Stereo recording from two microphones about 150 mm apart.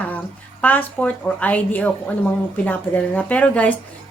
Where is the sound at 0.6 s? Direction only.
10° left (ahead or behind).